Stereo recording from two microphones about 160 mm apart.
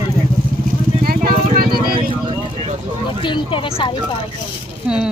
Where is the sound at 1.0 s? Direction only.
65° right (ahead or behind).